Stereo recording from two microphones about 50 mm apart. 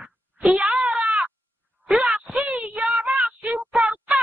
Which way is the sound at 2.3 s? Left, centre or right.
Right.